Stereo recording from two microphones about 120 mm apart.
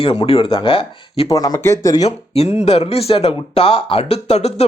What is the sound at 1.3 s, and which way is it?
Speech, 30° left (ahead or behind).